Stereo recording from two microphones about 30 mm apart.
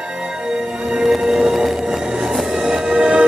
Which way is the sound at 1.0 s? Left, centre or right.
Centre.